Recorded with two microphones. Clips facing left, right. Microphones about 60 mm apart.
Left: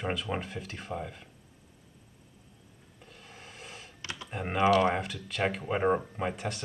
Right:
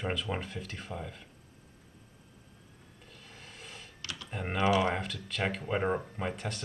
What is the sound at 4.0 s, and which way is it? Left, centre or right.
Computer keyboard, left.